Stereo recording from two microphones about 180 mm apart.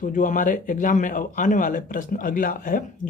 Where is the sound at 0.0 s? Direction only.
45° left (ahead or behind).